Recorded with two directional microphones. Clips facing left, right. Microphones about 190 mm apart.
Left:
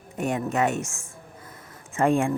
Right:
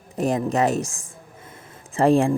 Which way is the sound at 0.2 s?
35° right (ahead or behind).